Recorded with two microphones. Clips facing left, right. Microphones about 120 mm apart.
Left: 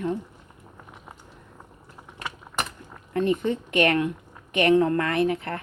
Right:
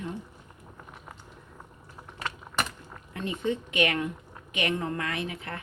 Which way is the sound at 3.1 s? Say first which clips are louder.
Left 7 dB; 50° left (ahead or behind).